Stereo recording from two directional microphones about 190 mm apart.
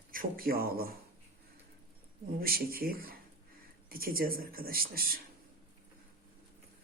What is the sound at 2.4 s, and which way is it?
Speech, 50° right (ahead or behind).